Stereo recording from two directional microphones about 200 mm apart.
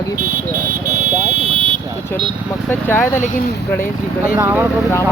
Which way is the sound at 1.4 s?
25° right (ahead or behind).